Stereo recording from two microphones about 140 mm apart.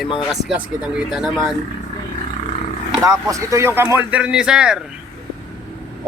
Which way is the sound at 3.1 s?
25° right (ahead or behind).